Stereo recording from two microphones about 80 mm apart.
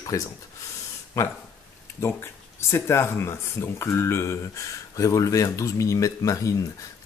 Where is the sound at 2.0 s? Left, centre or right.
Left.